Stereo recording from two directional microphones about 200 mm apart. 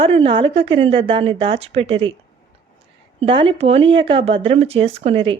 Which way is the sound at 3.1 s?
25° right (ahead or behind).